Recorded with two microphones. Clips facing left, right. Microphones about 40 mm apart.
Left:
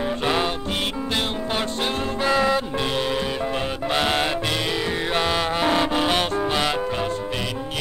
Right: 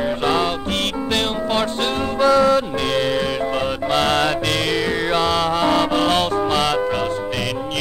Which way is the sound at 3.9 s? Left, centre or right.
Centre.